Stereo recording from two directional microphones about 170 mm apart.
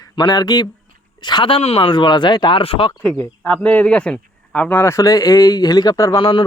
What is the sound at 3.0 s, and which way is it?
A man's voice, 10° left (ahead or behind).